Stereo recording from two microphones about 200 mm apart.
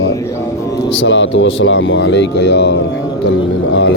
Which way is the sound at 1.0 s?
70° left (ahead or behind).